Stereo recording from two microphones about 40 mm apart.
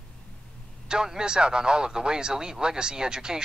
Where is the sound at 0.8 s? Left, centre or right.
Centre.